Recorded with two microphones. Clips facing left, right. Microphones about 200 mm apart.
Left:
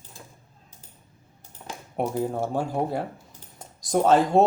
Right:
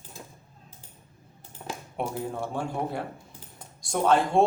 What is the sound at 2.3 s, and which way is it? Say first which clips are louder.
Speech: left 5 dB; 40° left (ahead or behind).